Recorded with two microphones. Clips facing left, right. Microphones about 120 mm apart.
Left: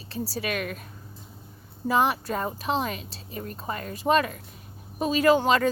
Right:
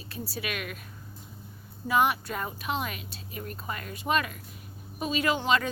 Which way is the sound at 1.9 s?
35° left (ahead or behind).